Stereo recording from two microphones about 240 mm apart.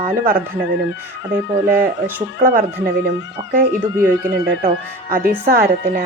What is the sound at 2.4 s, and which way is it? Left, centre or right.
Speech, right.